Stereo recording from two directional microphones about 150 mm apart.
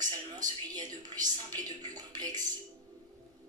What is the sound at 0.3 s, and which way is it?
Speech, 25° right (ahead or behind).